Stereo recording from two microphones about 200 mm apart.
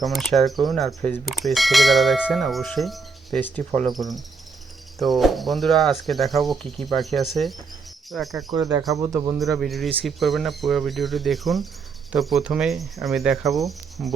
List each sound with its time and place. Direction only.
0.0 s bell: centre (ahead or behind)
8.5 s a man's voice: 20° right (ahead or behind)
9.6 s bell: centre (ahead or behind)